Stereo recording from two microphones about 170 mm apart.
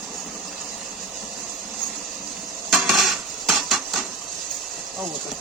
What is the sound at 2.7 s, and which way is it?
Dishes, centre (ahead or behind).